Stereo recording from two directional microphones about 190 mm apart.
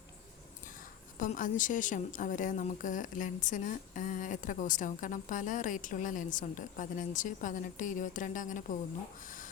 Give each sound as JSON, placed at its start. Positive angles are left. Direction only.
{"t": 1.2, "sound": "a woman's voice", "side_deg": 45}